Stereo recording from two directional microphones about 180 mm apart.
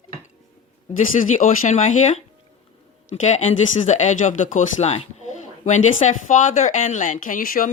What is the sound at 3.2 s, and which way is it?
Speech, 40° left (ahead or behind).